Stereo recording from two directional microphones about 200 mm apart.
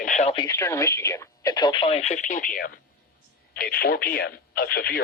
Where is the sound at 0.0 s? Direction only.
40° left (ahead or behind).